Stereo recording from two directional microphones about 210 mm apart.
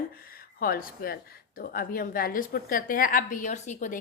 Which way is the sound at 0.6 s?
45° left (ahead or behind).